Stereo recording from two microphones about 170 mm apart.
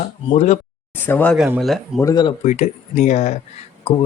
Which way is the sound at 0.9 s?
10° left (ahead or behind).